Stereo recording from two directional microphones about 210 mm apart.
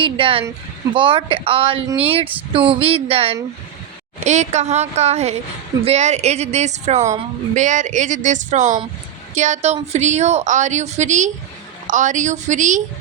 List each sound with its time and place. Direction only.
0.0 s a woman's voice: 25° right (ahead or behind)